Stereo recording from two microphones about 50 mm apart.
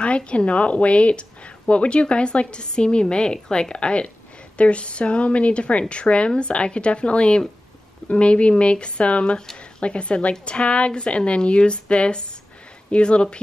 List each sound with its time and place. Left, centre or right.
0.0 s a woman's voice: left